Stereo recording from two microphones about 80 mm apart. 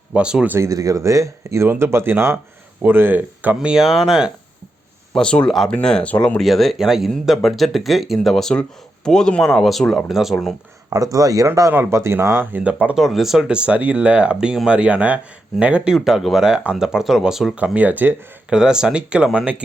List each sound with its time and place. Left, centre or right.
0.1 s speech: centre
0.6 s speech: right
1.6 s speech: right; by 3.8 s centre
3.8 s speech: centre
5.1 s speech: centre
5.5 s speech: centre
6.4 s speech: centre
10.9 s speech: right
11.7 s speech: right
12.5 s speech: centre
13.0 s speech: centre
17.6 s speech: centre
18.5 s speech: centre